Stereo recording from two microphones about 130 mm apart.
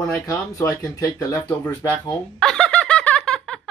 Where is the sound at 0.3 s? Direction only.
25° left (ahead or behind).